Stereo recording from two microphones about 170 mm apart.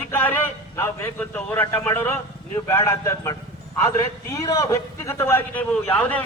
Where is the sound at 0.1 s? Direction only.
10° left (ahead or behind).